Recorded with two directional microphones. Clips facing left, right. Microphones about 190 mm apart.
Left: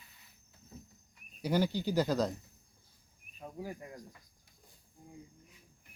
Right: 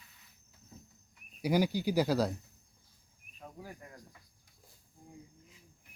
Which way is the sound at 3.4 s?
15° left (ahead or behind).